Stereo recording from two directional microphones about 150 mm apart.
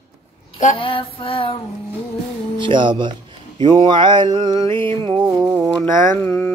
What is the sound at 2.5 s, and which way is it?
Speech, 30° right (ahead or behind).